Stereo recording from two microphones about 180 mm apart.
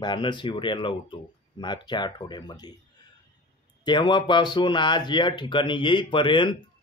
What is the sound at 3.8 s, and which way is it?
Speech, 25° left (ahead or behind).